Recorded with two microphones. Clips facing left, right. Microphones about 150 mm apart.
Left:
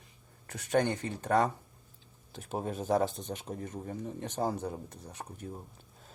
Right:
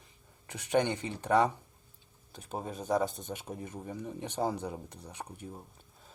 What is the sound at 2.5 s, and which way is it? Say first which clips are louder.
Speech: left 2 dB; 5° left (ahead or behind).